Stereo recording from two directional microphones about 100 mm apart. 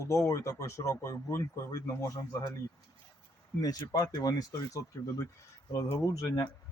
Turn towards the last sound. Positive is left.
turn(degrees=35)  # may be behind; listen again after turning